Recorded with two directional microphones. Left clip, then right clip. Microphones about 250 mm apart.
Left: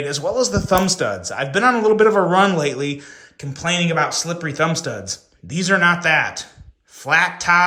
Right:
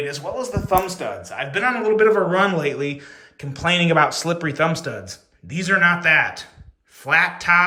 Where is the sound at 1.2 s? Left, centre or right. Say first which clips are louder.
Left 3 dB; centre.